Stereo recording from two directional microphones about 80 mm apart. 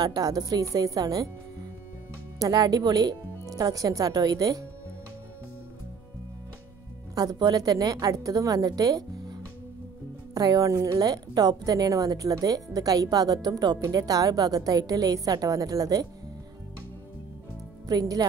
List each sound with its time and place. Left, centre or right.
0.0 s a woman's voice: right
2.3 s a woman's voice: right
7.2 s a woman's voice: right
13.7 s a woman's voice: right
17.8 s a woman's voice: right